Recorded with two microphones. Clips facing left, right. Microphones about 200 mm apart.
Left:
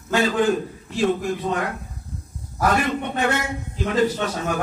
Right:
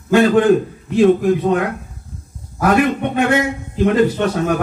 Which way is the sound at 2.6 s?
60° right (ahead or behind).